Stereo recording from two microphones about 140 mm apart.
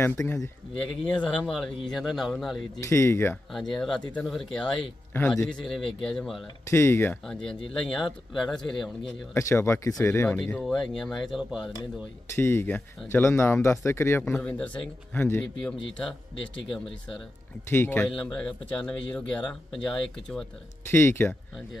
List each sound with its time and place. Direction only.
0.0 s speech: 15° left (ahead or behind)
0.4 s speech: 5° left (ahead or behind)
2.8 s speech: 20° left (ahead or behind)
3.5 s speech: centre (ahead or behind)
6.7 s speech: 20° left (ahead or behind)
7.2 s speech: 5° left (ahead or behind)
9.3 s speech: 20° left (ahead or behind)
10.4 s speech: 5° left (ahead or behind)
12.4 s speech: 20° left (ahead or behind)
14.2 s speech: centre (ahead or behind)
14.5 s speech: 15° left (ahead or behind)
17.6 s speech: 15° left (ahead or behind)
20.9 s speech: 15° left (ahead or behind)